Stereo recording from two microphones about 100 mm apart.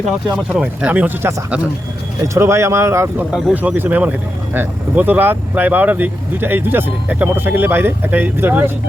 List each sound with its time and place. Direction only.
0.5 s speech: 10° right (ahead or behind)
2.2 s speech: 30° right (ahead or behind)
3.5 s speech: 15° right (ahead or behind)